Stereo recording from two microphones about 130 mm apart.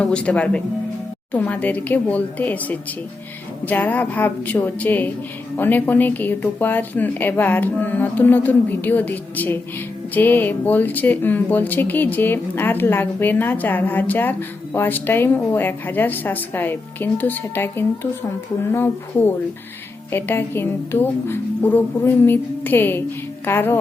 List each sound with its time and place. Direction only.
0.0 s speech: 10° left (ahead or behind)